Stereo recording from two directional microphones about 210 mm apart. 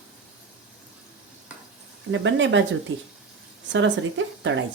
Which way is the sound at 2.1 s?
60° right (ahead or behind).